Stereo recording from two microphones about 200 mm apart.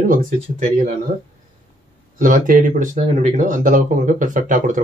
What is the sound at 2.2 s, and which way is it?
Speech, 45° right (ahead or behind).